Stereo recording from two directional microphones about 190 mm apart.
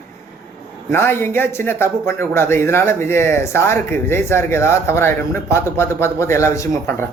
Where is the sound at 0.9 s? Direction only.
10° left (ahead or behind).